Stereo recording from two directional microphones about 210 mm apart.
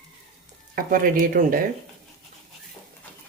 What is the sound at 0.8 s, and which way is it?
Speech, 40° right (ahead or behind).